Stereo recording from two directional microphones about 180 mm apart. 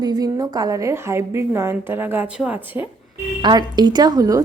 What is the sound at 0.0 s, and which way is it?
A woman's voice, 20° right (ahead or behind).